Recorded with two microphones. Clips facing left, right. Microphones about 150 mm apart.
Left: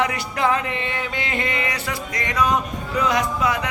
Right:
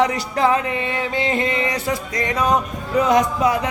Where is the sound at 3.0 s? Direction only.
40° right (ahead or behind).